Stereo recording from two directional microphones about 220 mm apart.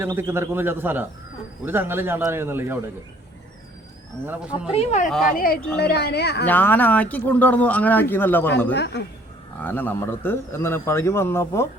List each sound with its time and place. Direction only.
0.0 s speech: 10° right (ahead or behind)
4.7 s speech: 30° left (ahead or behind)
5.6 s a woman's voice: 45° left (ahead or behind)
6.4 s speech: 10° left (ahead or behind)
8.7 s a woman's voice: 50° left (ahead or behind)
9.6 s speech: 10° left (ahead or behind)